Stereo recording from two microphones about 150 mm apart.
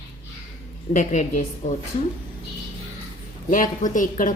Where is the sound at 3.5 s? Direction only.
60° left (ahead or behind).